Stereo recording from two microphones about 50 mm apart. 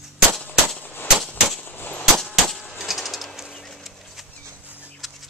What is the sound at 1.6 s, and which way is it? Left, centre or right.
Clang, left.